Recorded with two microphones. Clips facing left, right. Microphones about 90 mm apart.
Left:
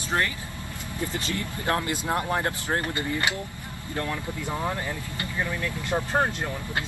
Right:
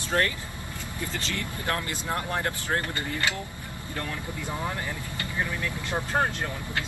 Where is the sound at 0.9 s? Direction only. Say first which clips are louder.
Left 3 dB; 20° left (ahead or behind).